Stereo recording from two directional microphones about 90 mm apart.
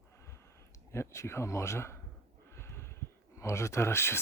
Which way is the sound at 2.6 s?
30° left (ahead or behind).